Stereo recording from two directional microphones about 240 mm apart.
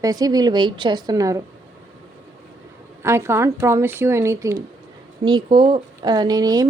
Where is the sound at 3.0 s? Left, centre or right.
Centre.